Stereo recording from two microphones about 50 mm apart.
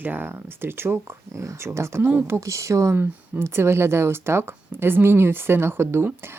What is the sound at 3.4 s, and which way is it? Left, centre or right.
Speech, right.